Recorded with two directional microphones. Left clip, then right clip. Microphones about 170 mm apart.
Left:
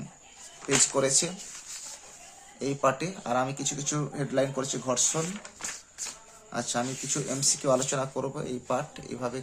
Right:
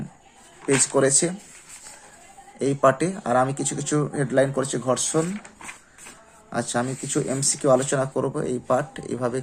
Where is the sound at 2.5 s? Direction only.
30° right (ahead or behind).